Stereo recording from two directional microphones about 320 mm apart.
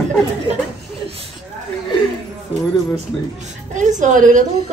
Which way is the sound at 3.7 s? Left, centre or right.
Right.